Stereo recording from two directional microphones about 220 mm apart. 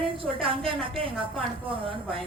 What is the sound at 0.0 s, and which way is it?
A woman's voice, 25° right (ahead or behind).